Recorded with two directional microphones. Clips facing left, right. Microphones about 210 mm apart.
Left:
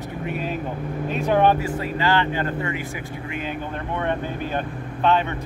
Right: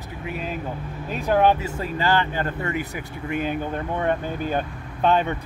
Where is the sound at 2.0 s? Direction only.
40° right (ahead or behind).